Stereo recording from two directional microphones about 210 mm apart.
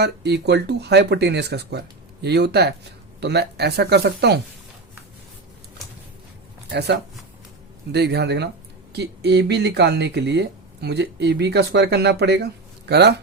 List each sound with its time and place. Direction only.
0.0 s speech: 50° right (ahead or behind)
6.7 s speech: 50° right (ahead or behind)